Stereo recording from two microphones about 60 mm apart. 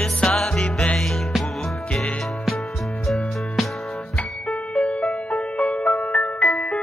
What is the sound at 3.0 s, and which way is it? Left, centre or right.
Music, centre.